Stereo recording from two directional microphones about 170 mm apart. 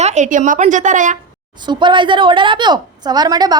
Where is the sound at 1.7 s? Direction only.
25° right (ahead or behind).